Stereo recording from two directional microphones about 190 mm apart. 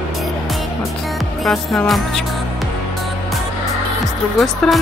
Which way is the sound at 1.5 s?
Centre (ahead or behind).